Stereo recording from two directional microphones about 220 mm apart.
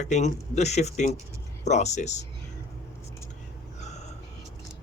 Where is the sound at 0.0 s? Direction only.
35° left (ahead or behind).